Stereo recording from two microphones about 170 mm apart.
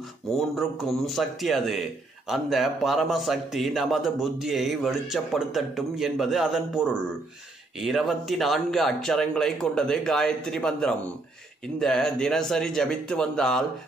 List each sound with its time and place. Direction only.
0.4 s a man's voice: centre (ahead or behind)